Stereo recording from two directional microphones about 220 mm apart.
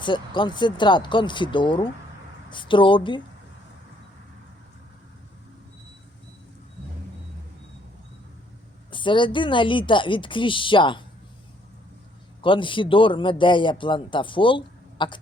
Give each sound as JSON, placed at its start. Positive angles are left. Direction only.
{"t": 0.0, "sound": "a man's voice", "side_deg": 20}
{"t": 8.9, "sound": "a man's voice", "side_deg": 20}
{"t": 12.4, "sound": "a man's voice", "side_deg": 20}